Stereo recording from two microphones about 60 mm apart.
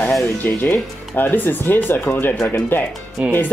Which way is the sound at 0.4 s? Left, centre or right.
Left.